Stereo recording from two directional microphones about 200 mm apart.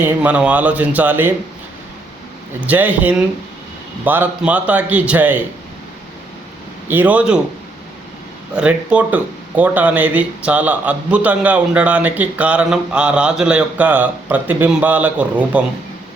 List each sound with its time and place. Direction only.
0.0 s speech: 5° right (ahead or behind)
2.6 s speech: 10° right (ahead or behind)
6.8 s speech: 10° right (ahead or behind)
8.5 s speech: 5° right (ahead or behind)